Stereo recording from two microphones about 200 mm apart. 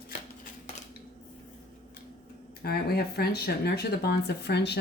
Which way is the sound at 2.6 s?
50° left (ahead or behind).